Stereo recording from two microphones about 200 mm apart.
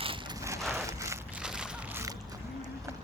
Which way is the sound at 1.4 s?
5° right (ahead or behind).